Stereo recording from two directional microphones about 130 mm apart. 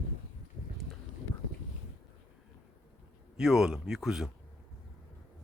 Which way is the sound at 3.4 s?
5° right (ahead or behind).